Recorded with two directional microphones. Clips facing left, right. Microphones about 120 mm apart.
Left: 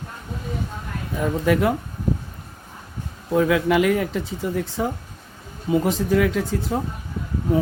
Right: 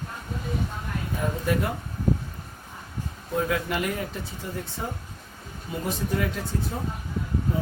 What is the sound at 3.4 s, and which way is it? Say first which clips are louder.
Speech: left 8 dB; 90° left.